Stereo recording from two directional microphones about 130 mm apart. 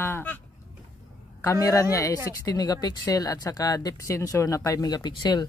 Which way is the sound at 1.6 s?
25° left (ahead or behind).